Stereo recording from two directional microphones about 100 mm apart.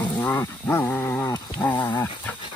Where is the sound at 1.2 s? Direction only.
40° left (ahead or behind).